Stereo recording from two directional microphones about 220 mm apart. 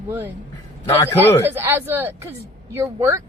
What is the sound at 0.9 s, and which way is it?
Speech, 10° left (ahead or behind).